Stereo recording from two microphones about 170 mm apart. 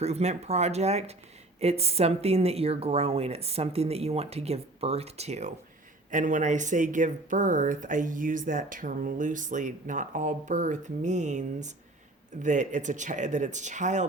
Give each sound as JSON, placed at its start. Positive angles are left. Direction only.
{"t": 0.0, "sound": "speech", "side_deg": -40}